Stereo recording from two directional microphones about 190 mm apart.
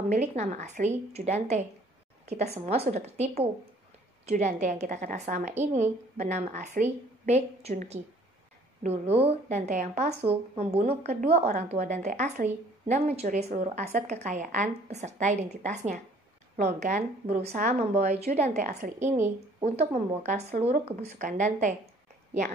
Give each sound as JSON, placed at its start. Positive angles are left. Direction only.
{"t": 0.1, "sound": "a woman's voice", "side_deg": -40}